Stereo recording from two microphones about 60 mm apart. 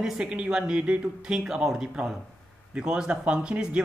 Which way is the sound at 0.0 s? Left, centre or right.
Centre.